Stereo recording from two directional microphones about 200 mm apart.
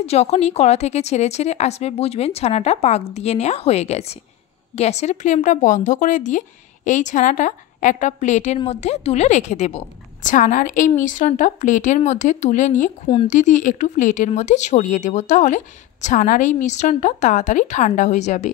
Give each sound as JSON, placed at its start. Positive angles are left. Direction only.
{"t": 0.0, "sound": "speech", "side_deg": 30}